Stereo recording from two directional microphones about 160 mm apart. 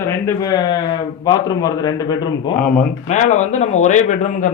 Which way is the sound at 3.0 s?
45° left (ahead or behind).